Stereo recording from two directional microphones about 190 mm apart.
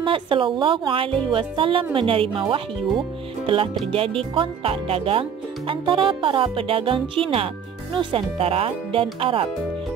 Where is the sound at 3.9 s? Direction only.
30° right (ahead or behind).